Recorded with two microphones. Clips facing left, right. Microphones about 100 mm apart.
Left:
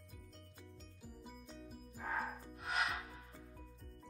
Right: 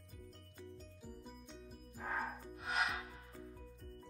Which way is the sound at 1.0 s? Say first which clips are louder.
Left 1 dB; centre (ahead or behind).